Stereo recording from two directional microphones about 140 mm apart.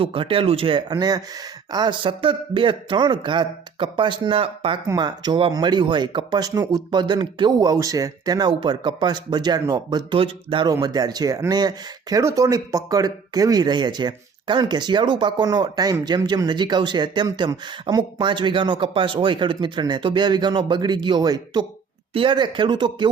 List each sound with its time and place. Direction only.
0.0 s speech: 40° right (ahead or behind)
4.9 s speech: 30° right (ahead or behind)
10.7 s speech: 25° right (ahead or behind)